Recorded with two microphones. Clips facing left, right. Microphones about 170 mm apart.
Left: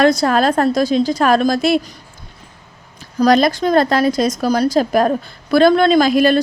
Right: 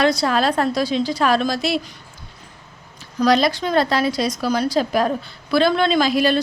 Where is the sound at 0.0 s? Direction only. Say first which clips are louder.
Left 5 dB; 45° left (ahead or behind).